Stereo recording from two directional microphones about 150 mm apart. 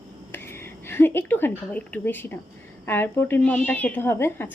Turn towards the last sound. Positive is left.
turn(degrees=15)  # may be behind; listen again after turning